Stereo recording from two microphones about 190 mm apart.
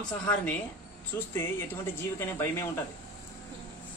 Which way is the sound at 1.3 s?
10° left (ahead or behind).